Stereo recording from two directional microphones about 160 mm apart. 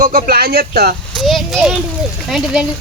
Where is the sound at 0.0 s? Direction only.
55° right (ahead or behind); by 0.9 s 70° right (ahead or behind).